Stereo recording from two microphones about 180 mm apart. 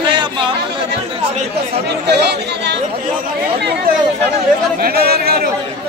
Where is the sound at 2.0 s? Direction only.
70° right (ahead or behind).